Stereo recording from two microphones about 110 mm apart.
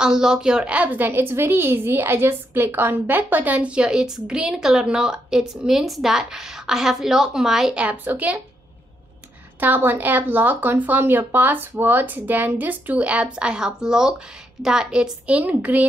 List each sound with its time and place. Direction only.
0.0 s a woman's voice: 5° right (ahead or behind)
9.6 s a woman's voice: 15° right (ahead or behind)